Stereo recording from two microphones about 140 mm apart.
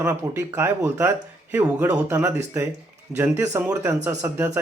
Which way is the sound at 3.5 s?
15° right (ahead or behind).